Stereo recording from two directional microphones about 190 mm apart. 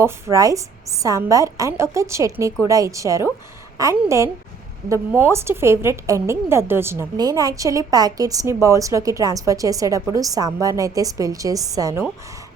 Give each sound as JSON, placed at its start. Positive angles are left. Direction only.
{"t": 0.0, "sound": "a woman's voice", "side_deg": -15}